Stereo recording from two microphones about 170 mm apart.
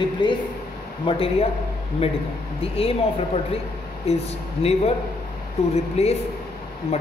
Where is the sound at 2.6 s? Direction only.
35° left (ahead or behind).